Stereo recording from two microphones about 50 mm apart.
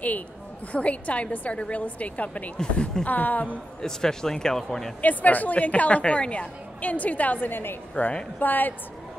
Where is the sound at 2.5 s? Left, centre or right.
Centre.